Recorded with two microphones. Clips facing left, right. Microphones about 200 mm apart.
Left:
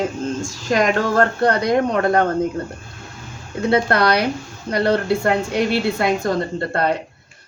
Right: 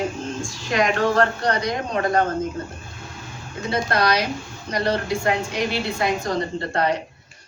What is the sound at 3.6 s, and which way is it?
Speech, 60° left (ahead or behind).